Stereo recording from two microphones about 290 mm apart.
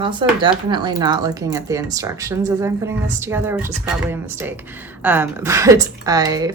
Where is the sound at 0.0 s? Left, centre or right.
Centre.